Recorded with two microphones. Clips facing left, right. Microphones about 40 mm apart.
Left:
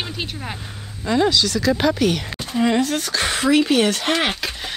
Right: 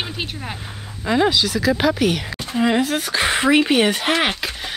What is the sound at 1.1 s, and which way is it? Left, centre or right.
A woman's voice, centre.